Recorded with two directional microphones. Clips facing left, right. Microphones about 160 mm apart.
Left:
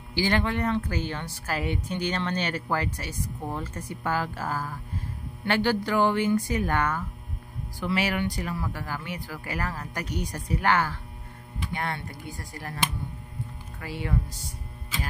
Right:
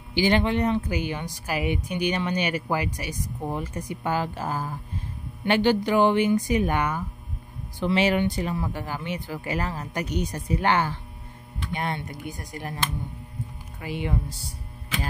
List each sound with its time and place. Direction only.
0.1 s a woman's voice: 20° right (ahead or behind)